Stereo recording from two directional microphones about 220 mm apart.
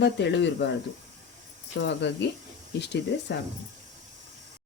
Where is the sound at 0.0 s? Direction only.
50° left (ahead or behind).